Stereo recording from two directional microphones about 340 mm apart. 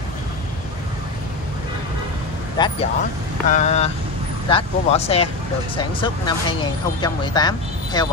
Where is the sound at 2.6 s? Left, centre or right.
Centre.